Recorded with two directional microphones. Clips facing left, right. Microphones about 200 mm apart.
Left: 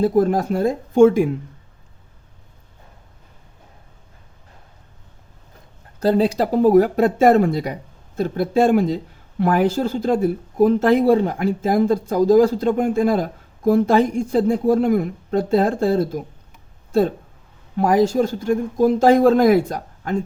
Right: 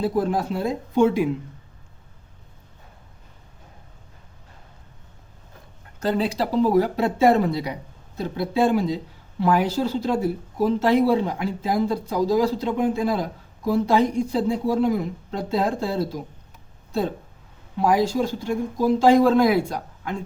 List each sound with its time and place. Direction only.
0.0 s speech: 45° left (ahead or behind)
6.0 s speech: 40° left (ahead or behind)
17.7 s speech: 45° left (ahead or behind)